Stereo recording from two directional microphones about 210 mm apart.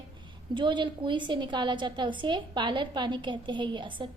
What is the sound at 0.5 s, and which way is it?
A woman's voice, 20° right (ahead or behind).